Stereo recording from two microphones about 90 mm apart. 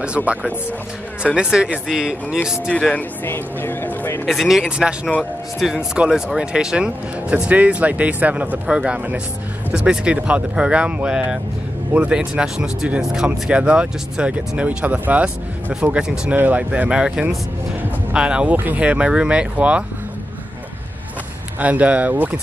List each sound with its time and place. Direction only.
0.0 s speech: 15° right (ahead or behind)
2.7 s speech: 15° left (ahead or behind)
4.3 s speech: centre (ahead or behind)
21.5 s speech: 15° right (ahead or behind)